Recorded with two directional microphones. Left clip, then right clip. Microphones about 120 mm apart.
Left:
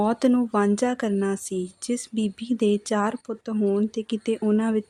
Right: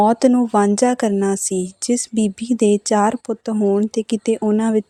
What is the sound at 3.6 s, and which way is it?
Speech, 25° right (ahead or behind).